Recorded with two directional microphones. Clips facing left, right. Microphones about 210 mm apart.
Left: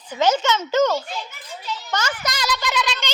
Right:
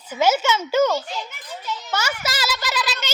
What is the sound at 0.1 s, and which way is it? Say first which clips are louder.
A child's voice: even; 10° right (ahead or behind).